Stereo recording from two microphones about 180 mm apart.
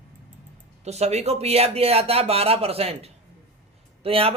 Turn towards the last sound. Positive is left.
turn(degrees=-30)  # may be behind; listen again after turning